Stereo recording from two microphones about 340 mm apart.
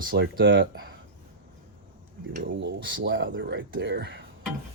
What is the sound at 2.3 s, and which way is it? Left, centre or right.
Speech, right.